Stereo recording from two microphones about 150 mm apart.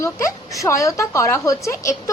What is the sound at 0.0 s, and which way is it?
A woman's voice, 20° left (ahead or behind).